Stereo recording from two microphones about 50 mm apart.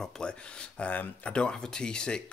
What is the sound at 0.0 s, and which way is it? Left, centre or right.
Speech, centre.